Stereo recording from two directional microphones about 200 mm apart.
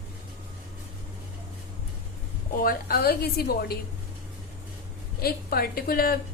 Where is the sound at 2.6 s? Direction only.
50° left (ahead or behind).